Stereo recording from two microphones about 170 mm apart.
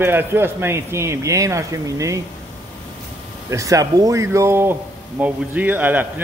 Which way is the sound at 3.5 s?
20° right (ahead or behind).